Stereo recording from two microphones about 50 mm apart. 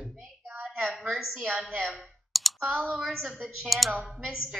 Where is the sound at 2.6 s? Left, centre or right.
Right.